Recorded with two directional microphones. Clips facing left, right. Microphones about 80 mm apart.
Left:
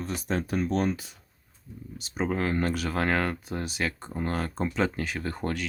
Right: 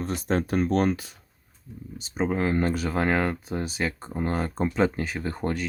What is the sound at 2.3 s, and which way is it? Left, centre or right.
Speech, centre.